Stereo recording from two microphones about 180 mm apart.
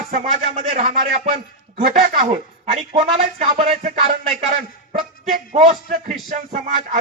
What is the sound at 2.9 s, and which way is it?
Music, 35° right (ahead or behind).